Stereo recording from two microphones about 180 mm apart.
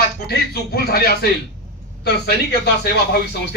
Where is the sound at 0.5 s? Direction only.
60° left (ahead or behind).